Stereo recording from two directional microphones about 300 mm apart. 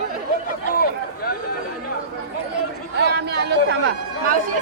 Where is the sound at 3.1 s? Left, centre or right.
Right.